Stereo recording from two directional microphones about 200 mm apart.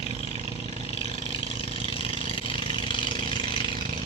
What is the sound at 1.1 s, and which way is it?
Vehicle, 40° right (ahead or behind).